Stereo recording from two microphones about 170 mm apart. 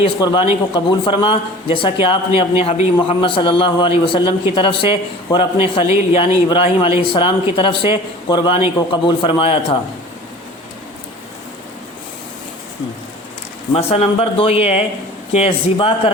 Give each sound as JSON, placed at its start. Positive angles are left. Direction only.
{"t": 0.0, "sound": "a man's voice", "side_deg": 30}
{"t": 13.7, "sound": "a man's voice", "side_deg": 35}